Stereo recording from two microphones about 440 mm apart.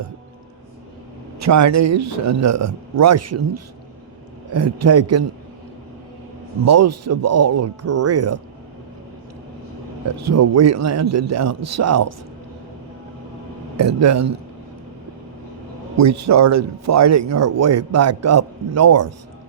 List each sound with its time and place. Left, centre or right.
1.4 s speech: right
6.7 s speech: right
10.2 s speech: right
13.7 s speech: right
16.0 s speech: right